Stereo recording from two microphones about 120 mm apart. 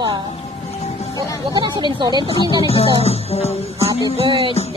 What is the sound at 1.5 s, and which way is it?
Speech, 40° right (ahead or behind).